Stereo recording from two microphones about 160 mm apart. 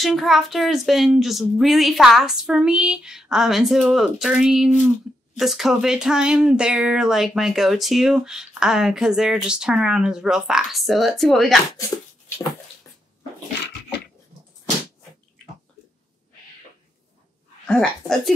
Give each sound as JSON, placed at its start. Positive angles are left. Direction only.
{"t": 0.0, "sound": "speech", "side_deg": 0}
{"t": 12.3, "sound": "a sound", "side_deg": 15}
{"t": 17.6, "sound": "speech", "side_deg": 5}